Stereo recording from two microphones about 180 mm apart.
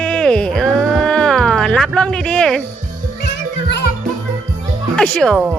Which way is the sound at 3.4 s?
70° left (ahead or behind).